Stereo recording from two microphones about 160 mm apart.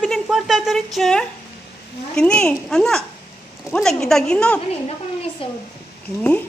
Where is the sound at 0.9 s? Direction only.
Centre (ahead or behind).